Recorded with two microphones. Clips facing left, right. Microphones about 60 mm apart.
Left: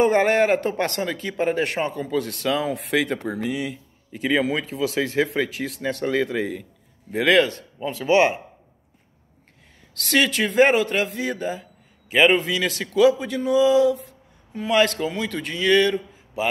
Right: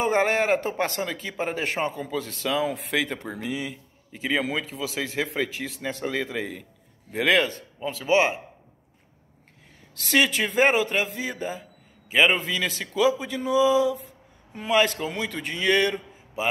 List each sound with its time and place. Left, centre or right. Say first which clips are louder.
0.0 s speech: left 5 dB; centre
4.8 s speech: left 10 dB; centre
5.9 s speech: left 5 dB; centre
6.1 s a man's voice: left 6 dB; centre
9.9 s speech: left 2 dB; centre
12.9 s speech: left 6 dB; centre